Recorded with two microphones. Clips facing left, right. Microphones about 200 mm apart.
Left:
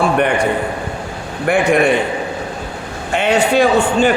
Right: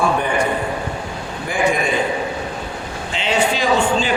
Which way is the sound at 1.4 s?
65° left (ahead or behind).